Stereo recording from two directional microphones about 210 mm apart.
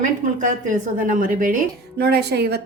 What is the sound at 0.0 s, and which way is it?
A woman's voice, 35° right (ahead or behind).